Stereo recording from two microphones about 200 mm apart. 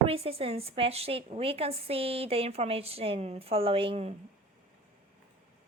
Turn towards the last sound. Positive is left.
turn(degrees=-30)  # may be behind; listen again after turning